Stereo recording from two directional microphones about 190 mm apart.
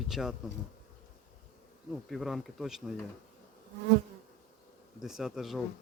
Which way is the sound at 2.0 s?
Centre (ahead or behind).